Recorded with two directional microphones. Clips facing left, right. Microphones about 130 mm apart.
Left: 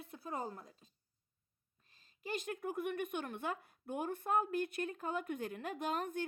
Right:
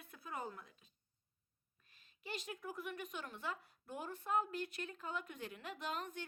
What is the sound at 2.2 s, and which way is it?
Speech, 55° left (ahead or behind).